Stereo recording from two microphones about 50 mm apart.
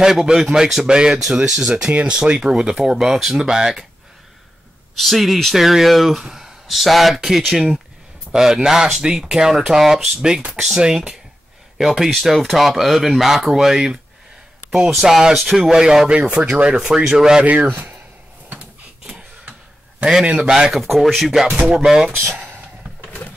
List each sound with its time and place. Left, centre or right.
0.0 s speech: centre
1.9 s speech: right
2.2 s speech: centre
4.9 s speech: centre
12.1 s speech: centre
15.0 s speech: centre
16.3 s speech: right
17.5 s speech: right
18.5 s a sound: right
20.2 s speech: centre
21.5 s speech: right
21.7 s speech: centre